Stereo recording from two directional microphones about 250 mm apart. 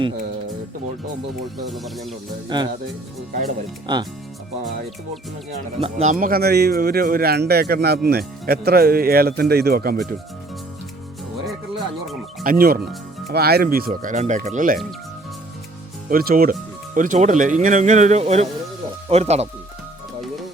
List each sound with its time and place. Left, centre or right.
1.6 s speech: centre
2.5 s speech: centre
3.9 s speech: centre
5.8 s speech: right
11.4 s music: centre
12.4 s speech: right
16.0 s speech: right